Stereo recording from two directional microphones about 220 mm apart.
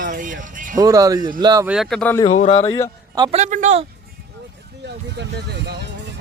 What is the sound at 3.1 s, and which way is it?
Speech, 20° right (ahead or behind).